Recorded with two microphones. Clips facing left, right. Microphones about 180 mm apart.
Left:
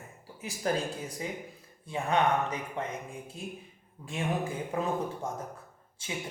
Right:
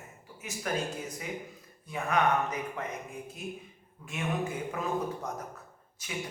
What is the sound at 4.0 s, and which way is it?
Speech, 35° left (ahead or behind).